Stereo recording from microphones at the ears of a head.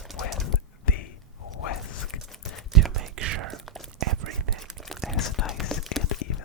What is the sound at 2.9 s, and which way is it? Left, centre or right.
Whispering, right.